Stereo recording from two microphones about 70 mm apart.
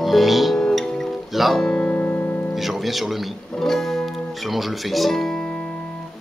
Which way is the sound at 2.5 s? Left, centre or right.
Centre.